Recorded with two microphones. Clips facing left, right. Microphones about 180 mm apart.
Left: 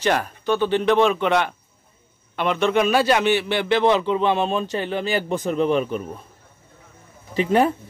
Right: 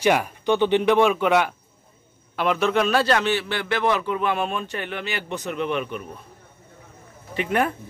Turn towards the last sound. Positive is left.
turn(degrees=30)  # may be behind; listen again after turning